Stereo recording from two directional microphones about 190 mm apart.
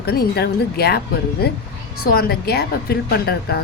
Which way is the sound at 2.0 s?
55° left (ahead or behind).